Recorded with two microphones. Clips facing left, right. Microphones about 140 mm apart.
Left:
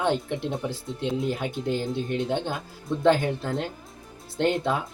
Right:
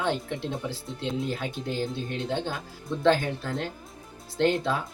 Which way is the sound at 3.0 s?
20° left (ahead or behind).